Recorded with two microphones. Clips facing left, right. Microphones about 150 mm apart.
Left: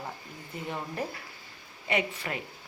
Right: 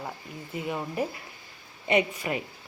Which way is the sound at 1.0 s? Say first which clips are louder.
Right 4 dB; 10° right (ahead or behind).